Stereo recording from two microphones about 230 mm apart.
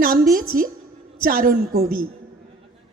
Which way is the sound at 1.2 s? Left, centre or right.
Right.